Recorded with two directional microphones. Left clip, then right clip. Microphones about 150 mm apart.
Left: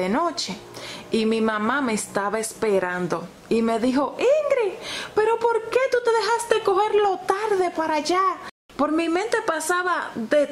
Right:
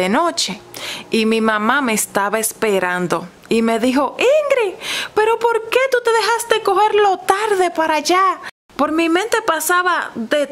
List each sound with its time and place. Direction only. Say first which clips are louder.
0.0 s a woman's voice: right 7 dB; 35° right (ahead or behind)